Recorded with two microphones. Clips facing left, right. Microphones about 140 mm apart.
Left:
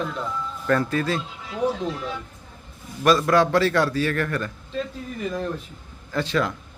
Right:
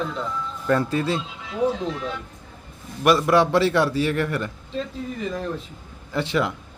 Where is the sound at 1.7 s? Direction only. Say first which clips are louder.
Left 2 dB; 5° left (ahead or behind).